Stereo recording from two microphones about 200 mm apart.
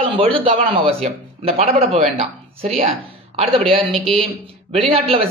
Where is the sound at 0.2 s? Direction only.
30° right (ahead or behind).